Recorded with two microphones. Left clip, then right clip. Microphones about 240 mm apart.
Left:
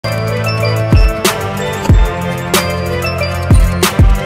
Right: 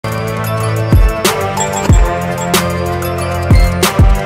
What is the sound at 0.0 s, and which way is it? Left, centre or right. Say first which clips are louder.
Music: left 2 dB; centre.